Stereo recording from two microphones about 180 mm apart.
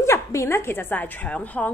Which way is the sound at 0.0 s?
15° left (ahead or behind).